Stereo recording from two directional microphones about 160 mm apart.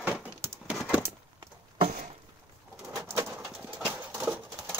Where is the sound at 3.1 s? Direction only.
15° right (ahead or behind).